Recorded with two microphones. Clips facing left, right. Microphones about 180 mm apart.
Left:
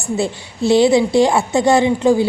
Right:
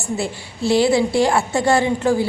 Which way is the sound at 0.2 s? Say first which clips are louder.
Left 4 dB; 20° left (ahead or behind).